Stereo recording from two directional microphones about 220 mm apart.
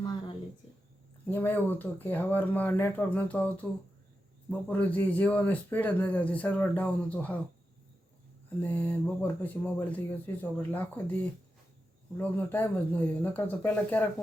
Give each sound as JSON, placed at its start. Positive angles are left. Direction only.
{"t": 0.0, "sound": "a sound", "side_deg": 20}
{"t": 1.3, "sound": "speech", "side_deg": 10}
{"t": 8.4, "sound": "speech", "side_deg": 10}
{"t": 12.1, "sound": "speech", "side_deg": 10}